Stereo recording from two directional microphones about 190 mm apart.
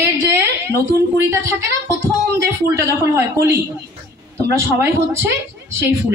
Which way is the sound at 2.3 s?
15° right (ahead or behind).